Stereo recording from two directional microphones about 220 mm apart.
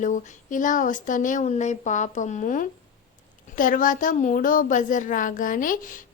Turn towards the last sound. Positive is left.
turn(degrees=40)  # may be behind; listen again after turning